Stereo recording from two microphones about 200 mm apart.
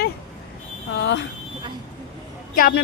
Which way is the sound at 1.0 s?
60° left (ahead or behind).